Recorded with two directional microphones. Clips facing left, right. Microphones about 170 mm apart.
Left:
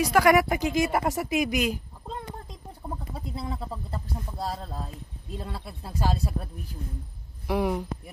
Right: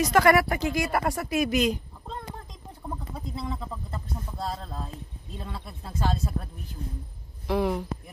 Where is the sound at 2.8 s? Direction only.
10° left (ahead or behind).